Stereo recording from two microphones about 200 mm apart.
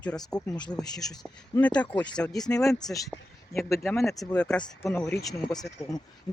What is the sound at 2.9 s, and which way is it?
Speech, 15° left (ahead or behind).